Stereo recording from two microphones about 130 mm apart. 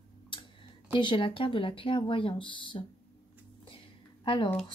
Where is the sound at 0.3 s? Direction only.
40° left (ahead or behind).